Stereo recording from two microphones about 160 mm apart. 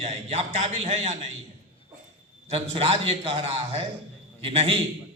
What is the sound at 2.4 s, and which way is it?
A man's voice, 40° right (ahead or behind).